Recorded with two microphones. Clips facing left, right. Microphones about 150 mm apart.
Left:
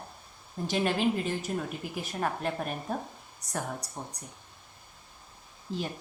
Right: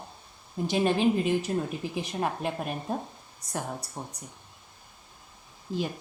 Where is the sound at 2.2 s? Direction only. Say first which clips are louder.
Even; 10° right (ahead or behind).